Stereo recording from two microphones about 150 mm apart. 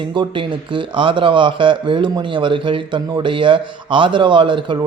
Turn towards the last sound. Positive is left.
turn(degrees=-35)  # may be behind; listen again after turning